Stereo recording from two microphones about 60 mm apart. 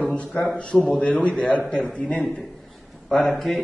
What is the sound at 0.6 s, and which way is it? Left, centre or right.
A man's voice, centre.